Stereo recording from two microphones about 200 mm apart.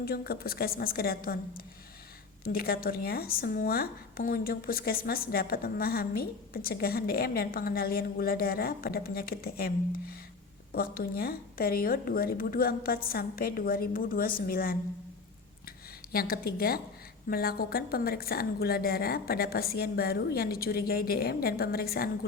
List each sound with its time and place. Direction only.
0.0 s speech: 50° left (ahead or behind)
16.1 s speech: 50° left (ahead or behind)